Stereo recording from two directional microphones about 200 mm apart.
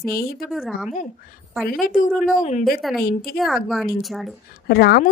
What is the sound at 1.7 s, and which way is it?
Speech, 45° left (ahead or behind).